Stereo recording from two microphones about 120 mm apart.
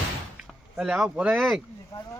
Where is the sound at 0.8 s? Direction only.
5° right (ahead or behind).